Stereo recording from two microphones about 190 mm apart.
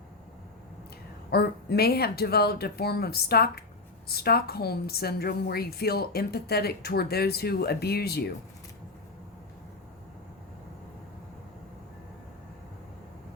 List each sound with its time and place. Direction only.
1.3 s a woman's voice: 55° left (ahead or behind)